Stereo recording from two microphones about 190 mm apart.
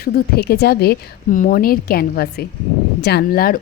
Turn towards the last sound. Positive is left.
turn(degrees=50)  # may be behind; listen again after turning